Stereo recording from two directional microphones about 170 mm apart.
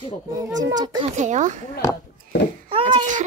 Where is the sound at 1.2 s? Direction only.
45° right (ahead or behind).